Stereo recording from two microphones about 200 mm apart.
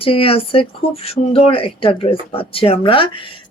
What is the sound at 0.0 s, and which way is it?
Speech, 30° left (ahead or behind).